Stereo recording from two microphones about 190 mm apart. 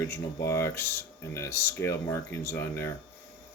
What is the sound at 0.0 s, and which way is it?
Speech, 15° left (ahead or behind).